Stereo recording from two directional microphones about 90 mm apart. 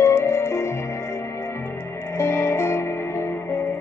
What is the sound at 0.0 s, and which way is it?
Music, 30° left (ahead or behind).